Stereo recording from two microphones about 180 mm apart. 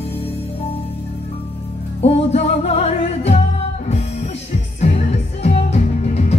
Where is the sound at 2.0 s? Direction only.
35° left (ahead or behind).